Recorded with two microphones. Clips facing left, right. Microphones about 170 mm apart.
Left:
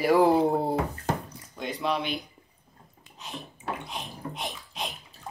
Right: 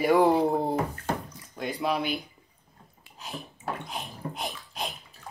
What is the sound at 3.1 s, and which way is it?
Bathtub, 5° right (ahead or behind).